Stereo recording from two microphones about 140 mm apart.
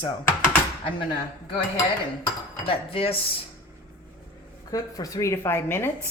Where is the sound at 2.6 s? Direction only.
40° left (ahead or behind).